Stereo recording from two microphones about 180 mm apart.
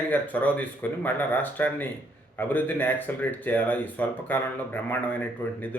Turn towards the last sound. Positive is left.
turn(degrees=10)  # may be behind; listen again after turning